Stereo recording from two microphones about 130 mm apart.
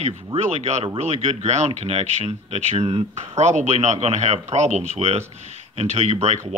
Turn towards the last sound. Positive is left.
turn(degrees=-55)  # may be behind; listen again after turning